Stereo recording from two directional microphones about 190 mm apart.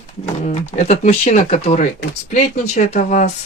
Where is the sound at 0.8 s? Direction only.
40° left (ahead or behind).